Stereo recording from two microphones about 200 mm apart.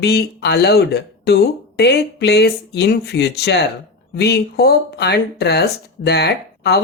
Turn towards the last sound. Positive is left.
turn(degrees=55)  # may be behind; listen again after turning